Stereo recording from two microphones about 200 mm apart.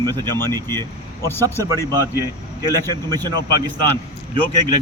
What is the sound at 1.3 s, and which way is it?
Speech, 10° left (ahead or behind).